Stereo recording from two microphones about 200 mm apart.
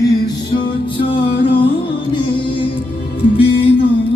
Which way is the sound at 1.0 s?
30° left (ahead or behind).